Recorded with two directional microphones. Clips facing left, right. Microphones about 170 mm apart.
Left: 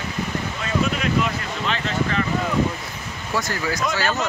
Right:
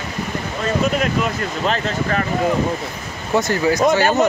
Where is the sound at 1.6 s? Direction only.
40° right (ahead or behind).